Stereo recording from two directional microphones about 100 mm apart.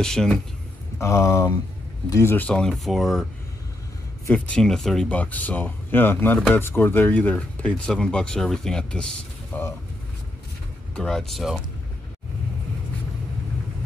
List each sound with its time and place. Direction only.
0.0 s speech: 5° left (ahead or behind)
0.9 s speech: 30° left (ahead or behind)
2.3 s speech: 10° left (ahead or behind)
4.3 s speech: 10° left (ahead or behind)
9.5 s speech: 20° left (ahead or behind)
11.0 s speech: 5° left (ahead or behind)